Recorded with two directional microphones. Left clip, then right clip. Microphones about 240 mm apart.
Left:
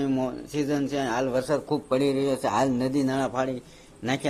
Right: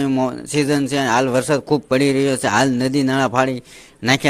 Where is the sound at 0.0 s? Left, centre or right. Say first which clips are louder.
Right 8 dB; right.